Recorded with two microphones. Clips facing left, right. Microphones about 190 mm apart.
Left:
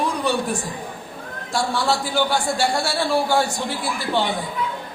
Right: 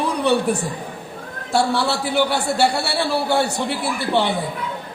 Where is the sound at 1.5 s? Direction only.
65° right (ahead or behind).